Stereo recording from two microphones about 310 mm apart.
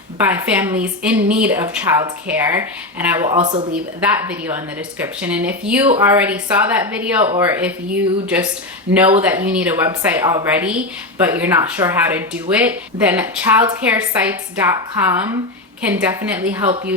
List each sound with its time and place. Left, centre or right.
0.2 s speech: centre
4.0 s speech: centre
8.9 s speech: centre